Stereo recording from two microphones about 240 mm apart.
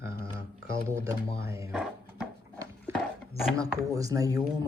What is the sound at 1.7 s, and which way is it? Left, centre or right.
Music, centre.